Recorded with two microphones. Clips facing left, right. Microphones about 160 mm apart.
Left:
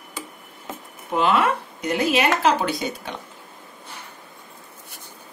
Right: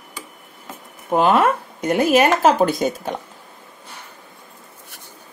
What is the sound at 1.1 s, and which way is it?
Speech, 45° right (ahead or behind).